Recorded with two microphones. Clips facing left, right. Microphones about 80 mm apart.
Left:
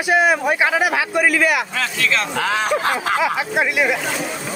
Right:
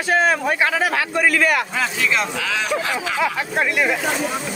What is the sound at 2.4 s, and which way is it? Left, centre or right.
Speech, left.